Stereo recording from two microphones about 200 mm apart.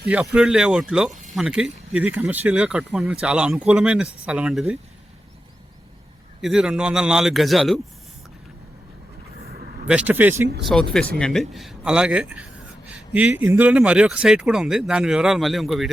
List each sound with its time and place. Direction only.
0.3 s speech: 5° right (ahead or behind)
6.4 s speech: 5° right (ahead or behind)
9.4 s vehicle: 50° right (ahead or behind)
9.8 s speech: 5° right (ahead or behind)
10.6 s speech: centre (ahead or behind)